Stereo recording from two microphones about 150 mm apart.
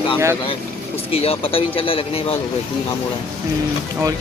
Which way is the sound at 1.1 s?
40° left (ahead or behind).